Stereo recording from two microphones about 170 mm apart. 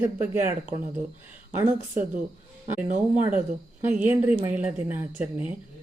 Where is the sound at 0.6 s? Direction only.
45° right (ahead or behind).